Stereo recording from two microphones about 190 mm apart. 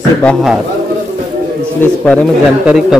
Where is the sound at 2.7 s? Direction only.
5° right (ahead or behind).